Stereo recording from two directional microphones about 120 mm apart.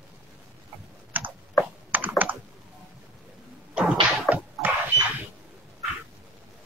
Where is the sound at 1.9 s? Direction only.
15° right (ahead or behind).